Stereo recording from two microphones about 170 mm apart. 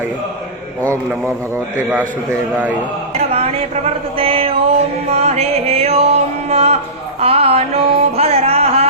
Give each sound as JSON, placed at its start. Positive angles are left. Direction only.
{"t": 1.5, "sound": "a man's voice", "side_deg": -10}
{"t": 4.2, "sound": "a sound", "side_deg": -35}
{"t": 5.1, "sound": "music", "side_deg": -40}